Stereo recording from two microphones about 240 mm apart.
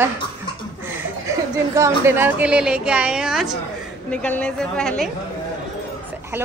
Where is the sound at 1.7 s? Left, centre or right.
Centre.